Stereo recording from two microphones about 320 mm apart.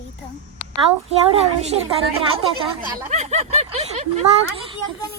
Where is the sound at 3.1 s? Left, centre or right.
Centre.